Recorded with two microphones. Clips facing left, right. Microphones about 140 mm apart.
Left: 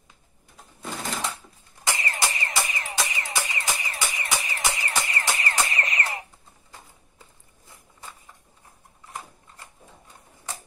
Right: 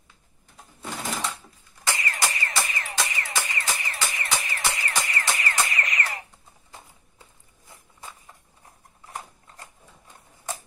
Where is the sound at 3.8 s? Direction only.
15° left (ahead or behind).